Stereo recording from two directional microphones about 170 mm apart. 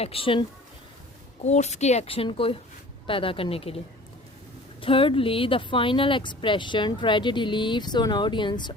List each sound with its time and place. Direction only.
0.0 s a woman's voice: 35° left (ahead or behind)
1.5 s a woman's voice: 40° left (ahead or behind)
4.8 s speech: 30° left (ahead or behind)